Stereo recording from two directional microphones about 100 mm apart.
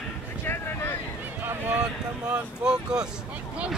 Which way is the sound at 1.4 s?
20° right (ahead or behind).